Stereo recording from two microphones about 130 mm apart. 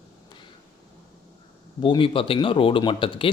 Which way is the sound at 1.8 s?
40° left (ahead or behind).